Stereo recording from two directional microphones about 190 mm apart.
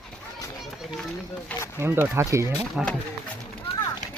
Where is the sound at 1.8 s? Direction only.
10° right (ahead or behind).